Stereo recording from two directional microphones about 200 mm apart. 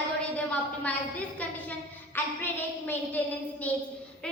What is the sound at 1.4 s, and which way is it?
A woman's voice, 5° left (ahead or behind).